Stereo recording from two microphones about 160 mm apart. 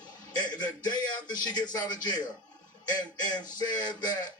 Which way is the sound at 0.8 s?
25° left (ahead or behind).